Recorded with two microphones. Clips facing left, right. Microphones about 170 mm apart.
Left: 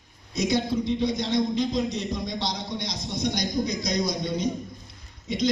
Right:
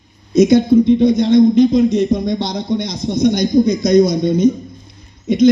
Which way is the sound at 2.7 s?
20° right (ahead or behind).